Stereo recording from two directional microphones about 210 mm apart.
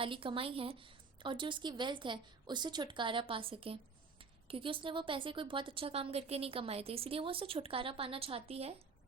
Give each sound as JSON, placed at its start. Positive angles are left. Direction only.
{"t": 0.0, "sound": "speech", "side_deg": -25}